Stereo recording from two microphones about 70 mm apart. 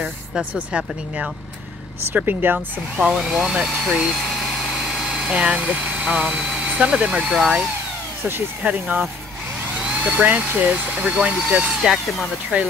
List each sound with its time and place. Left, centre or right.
0.7 s speech: centre
2.1 s speech: right
3.0 s speech: centre
8.6 s speech: right
11.8 s speech: centre
12.5 s speech: centre